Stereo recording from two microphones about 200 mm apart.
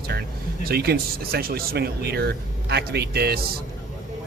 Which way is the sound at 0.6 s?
50° right (ahead or behind).